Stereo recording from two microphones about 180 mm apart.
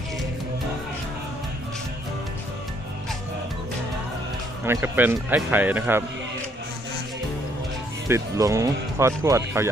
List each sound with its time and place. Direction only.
4.6 s speech: 15° right (ahead or behind)
8.0 s speech: 15° right (ahead or behind)